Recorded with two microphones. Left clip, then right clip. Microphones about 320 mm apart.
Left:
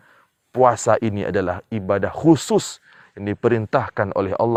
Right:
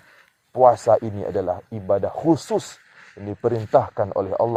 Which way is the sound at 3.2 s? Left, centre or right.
Left.